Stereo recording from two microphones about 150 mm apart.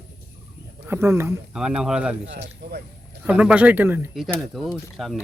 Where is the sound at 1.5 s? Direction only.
5° right (ahead or behind).